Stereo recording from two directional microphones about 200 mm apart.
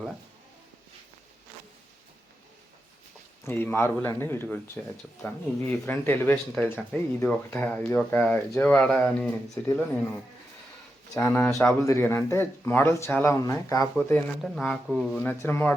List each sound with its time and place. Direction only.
3.4 s speech: 10° left (ahead or behind)
11.1 s speech: 10° left (ahead or behind)
13.9 s speech: 5° left (ahead or behind)